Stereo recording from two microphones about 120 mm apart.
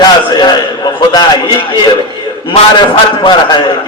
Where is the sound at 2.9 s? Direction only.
40° left (ahead or behind).